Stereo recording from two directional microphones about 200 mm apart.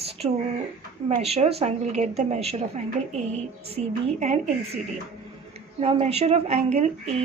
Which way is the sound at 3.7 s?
35° right (ahead or behind).